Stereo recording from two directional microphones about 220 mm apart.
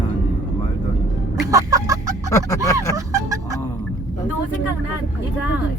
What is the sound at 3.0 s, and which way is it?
Music, 15° right (ahead or behind).